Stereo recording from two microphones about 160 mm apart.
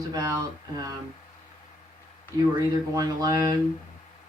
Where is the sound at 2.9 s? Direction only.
25° right (ahead or behind).